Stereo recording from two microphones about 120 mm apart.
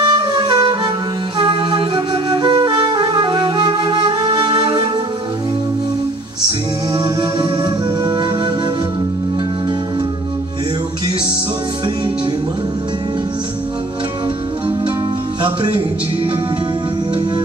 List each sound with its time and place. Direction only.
0.0 s music: 40° right (ahead or behind)
1.4 s flute: 45° right (ahead or behind)
7.2 s music: 40° right (ahead or behind)
15.4 s music: 35° right (ahead or behind)